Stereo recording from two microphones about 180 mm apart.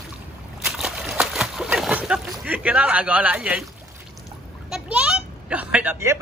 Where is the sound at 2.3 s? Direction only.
10° right (ahead or behind).